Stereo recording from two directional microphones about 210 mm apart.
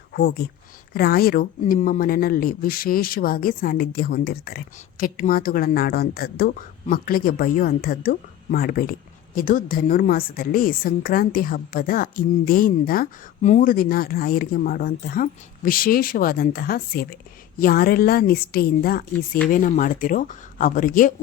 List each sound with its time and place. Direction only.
0.1 s speech: 50° left (ahead or behind)